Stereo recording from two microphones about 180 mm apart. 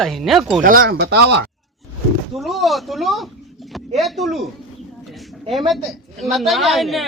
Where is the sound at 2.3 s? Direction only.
Centre (ahead or behind).